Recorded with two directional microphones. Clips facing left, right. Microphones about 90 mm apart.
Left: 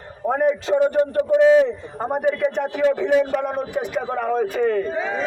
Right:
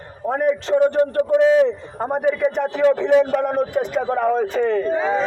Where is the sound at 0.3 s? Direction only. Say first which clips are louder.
Even; 10° left (ahead or behind).